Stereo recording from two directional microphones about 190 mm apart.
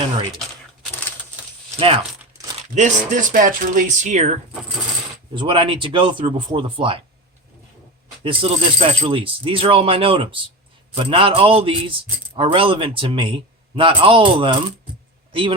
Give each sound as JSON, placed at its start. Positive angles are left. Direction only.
{"t": 2.7, "sound": "speech", "side_deg": -40}
{"t": 5.3, "sound": "a man's voice", "side_deg": -25}
{"t": 8.2, "sound": "a man's voice", "side_deg": -30}